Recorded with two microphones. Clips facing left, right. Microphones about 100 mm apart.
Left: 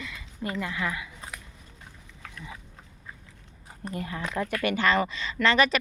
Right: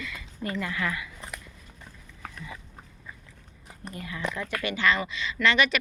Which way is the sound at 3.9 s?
40° left (ahead or behind).